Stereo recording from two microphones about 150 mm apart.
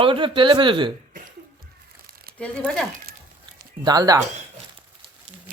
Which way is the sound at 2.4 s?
5° left (ahead or behind).